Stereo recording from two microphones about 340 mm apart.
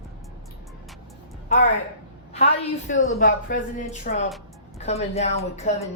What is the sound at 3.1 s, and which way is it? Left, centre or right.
Speech, left.